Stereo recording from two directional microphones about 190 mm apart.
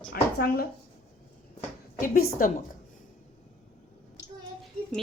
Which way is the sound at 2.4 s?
45° left (ahead or behind).